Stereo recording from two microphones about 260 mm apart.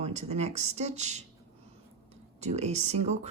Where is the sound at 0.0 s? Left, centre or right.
Right.